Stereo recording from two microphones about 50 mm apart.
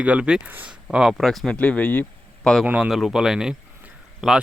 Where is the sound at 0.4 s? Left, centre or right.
Right.